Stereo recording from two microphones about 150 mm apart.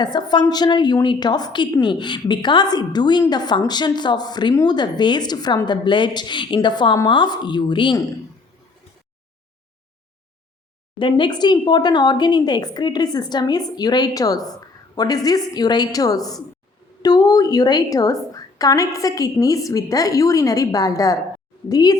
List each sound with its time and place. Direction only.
0.0 s a woman's voice: 30° left (ahead or behind)
10.9 s a woman's voice: 30° left (ahead or behind)